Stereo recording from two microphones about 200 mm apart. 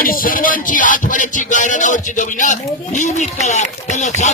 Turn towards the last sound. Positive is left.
turn(degrees=35)  # may be behind; listen again after turning